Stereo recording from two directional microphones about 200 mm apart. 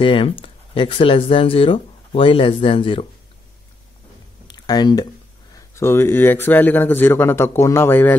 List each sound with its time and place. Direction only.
0.0 s speech: 25° left (ahead or behind)
4.5 s a sound: 20° left (ahead or behind)
5.8 s speech: 10° left (ahead or behind)